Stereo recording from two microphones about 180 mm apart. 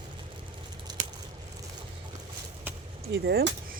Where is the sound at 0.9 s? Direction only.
25° right (ahead or behind).